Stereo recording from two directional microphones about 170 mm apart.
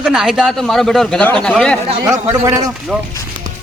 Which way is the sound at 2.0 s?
20° right (ahead or behind).